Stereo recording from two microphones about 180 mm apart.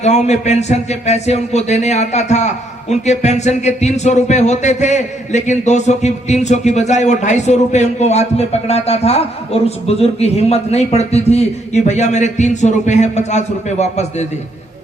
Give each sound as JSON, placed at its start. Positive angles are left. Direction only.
{"t": 0.0, "sound": "speech", "side_deg": 40}